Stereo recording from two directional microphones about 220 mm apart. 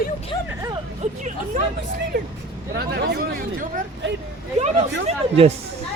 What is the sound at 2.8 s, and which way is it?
Speech, 45° right (ahead or behind).